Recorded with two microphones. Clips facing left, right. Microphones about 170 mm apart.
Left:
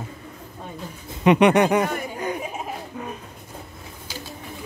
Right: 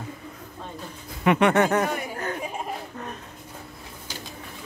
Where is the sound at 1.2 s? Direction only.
20° left (ahead or behind).